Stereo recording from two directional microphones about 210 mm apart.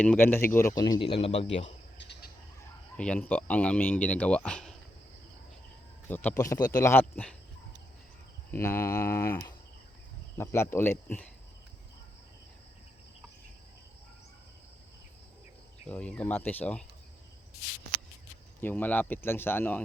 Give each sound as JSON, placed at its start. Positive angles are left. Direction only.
{"t": 0.0, "sound": "speech", "side_deg": 10}
{"t": 1.2, "sound": "speech", "side_deg": 30}
{"t": 2.0, "sound": "bird", "side_deg": 55}
{"t": 3.0, "sound": "speech", "side_deg": 5}
{"t": 6.1, "sound": "speech", "side_deg": 10}
{"t": 8.4, "sound": "speech", "side_deg": 10}
{"t": 15.9, "sound": "speech", "side_deg": 5}
{"t": 18.6, "sound": "speech", "side_deg": 10}